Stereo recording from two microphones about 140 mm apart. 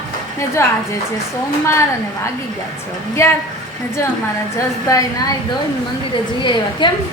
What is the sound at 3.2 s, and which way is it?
Speech, 20° left (ahead or behind).